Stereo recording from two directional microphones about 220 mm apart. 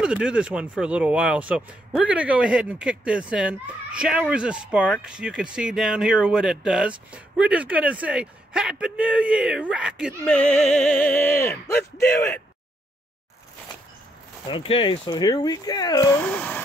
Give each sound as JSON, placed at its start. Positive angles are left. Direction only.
{"t": 0.0, "sound": "speech", "side_deg": -5}
{"t": 14.5, "sound": "speech", "side_deg": 25}
{"t": 16.3, "sound": "a sound", "side_deg": 10}